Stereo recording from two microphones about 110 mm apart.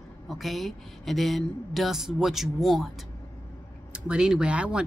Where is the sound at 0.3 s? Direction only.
Centre (ahead or behind).